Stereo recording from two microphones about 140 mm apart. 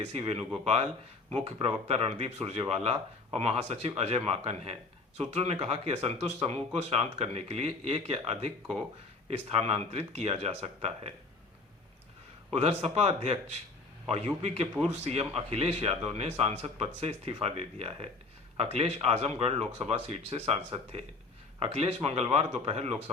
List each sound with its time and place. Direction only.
0.1 s speech: 45° right (ahead or behind)
12.5 s speech: 50° right (ahead or behind)
14.4 s speech: 50° right (ahead or behind)